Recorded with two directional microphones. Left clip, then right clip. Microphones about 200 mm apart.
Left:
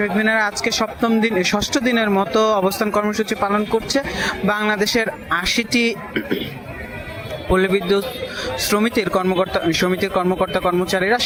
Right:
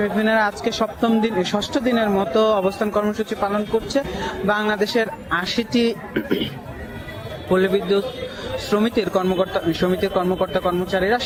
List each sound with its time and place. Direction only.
0.0 s speech: 10° left (ahead or behind)
6.2 s a man's voice: 15° right (ahead or behind)
7.5 s a man's voice: 15° left (ahead or behind)